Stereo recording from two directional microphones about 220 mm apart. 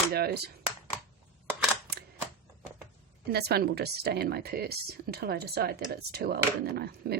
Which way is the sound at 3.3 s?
45° right (ahead or behind).